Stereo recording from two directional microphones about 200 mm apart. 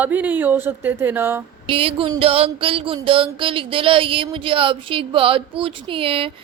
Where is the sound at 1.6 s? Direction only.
25° right (ahead or behind).